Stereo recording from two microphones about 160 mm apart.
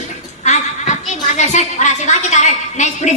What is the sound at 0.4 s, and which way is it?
A woman's voice, 50° left (ahead or behind).